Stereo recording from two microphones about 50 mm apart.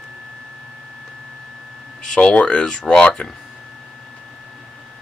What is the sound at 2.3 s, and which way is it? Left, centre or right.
Speech, left.